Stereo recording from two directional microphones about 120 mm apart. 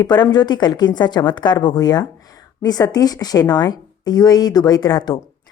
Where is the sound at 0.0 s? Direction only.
40° left (ahead or behind).